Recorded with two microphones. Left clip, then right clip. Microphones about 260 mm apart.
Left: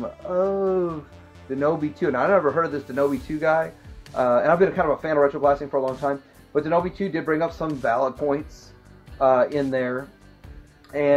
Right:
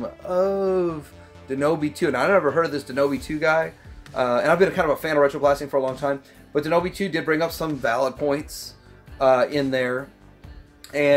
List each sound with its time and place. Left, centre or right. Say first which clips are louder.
0.0 s speech: right 1 dB; right